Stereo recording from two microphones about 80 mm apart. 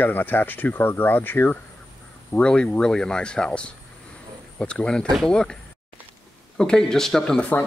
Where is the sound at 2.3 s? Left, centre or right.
Centre.